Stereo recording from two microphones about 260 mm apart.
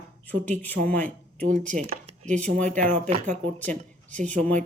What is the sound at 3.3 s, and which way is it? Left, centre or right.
Speech, centre.